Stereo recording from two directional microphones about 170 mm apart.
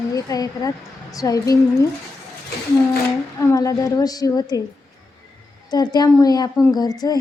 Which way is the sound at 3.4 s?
20° left (ahead or behind).